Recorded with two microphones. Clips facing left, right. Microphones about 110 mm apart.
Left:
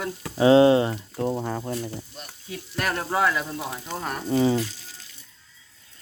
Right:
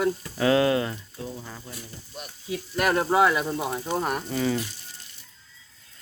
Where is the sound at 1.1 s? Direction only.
55° left (ahead or behind).